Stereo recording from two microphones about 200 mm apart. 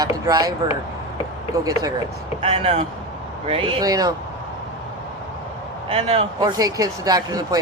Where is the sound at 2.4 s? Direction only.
30° right (ahead or behind).